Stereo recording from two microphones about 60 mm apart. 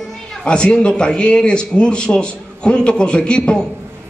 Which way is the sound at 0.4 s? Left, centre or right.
Centre.